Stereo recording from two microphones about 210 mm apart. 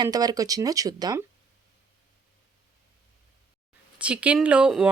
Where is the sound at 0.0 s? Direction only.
20° right (ahead or behind).